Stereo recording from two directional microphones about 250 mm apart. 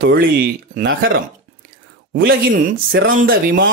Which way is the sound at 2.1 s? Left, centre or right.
Right.